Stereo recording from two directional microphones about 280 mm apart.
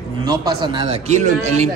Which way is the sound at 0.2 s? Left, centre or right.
Centre.